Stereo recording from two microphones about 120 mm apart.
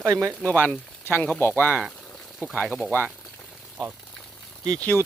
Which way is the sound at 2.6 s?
Centre (ahead or behind).